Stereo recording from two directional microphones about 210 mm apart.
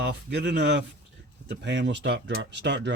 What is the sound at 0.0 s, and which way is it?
Speech, 55° right (ahead or behind).